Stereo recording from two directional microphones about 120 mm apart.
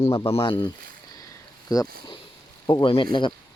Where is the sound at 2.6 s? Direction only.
45° left (ahead or behind).